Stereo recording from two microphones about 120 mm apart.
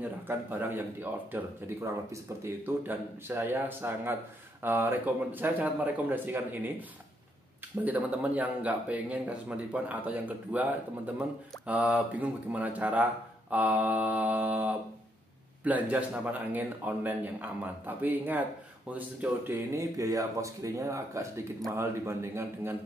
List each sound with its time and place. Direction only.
0.0 s speech: 15° right (ahead or behind)
7.8 s speech: 15° right (ahead or behind)